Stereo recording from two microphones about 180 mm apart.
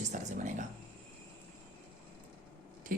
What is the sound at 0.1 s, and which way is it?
Speech, 45° right (ahead or behind).